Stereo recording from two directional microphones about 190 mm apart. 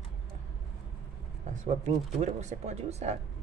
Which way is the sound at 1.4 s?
40° right (ahead or behind).